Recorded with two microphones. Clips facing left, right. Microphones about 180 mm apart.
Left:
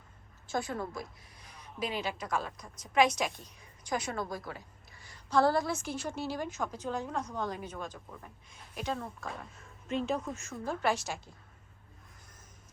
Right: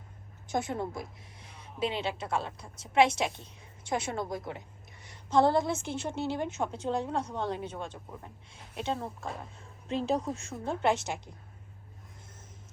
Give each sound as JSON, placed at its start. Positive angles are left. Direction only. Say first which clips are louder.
{"t": 0.4, "sound": "a woman's voice", "louder": "right 3 dB", "side_deg": -20}